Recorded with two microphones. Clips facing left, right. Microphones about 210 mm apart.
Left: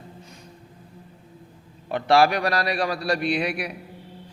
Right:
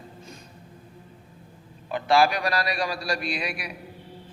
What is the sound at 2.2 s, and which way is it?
A man's voice, 60° left (ahead or behind).